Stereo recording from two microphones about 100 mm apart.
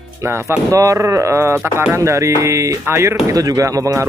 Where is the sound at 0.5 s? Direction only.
35° right (ahead or behind).